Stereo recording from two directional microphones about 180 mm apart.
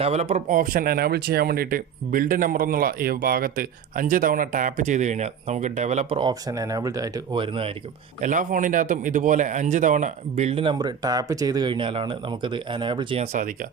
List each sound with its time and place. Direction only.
0.0 s speech: 35° right (ahead or behind)
8.2 s speech: 45° right (ahead or behind); by 13.2 s 25° right (ahead or behind)
13.3 s speech: 45° right (ahead or behind)